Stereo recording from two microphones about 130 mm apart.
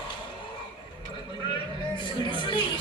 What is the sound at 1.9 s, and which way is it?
Music, 40° left (ahead or behind).